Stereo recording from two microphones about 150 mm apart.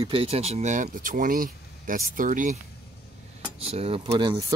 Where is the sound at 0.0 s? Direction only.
40° right (ahead or behind); by 2.6 s 60° right (ahead or behind).